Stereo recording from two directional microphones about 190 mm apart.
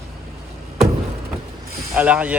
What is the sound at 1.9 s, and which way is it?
Speech, 5° right (ahead or behind).